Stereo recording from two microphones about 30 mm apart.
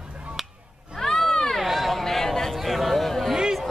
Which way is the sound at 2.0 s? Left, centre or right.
Centre.